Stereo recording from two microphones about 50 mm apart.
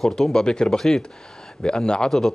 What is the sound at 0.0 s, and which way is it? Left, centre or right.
Speech, centre.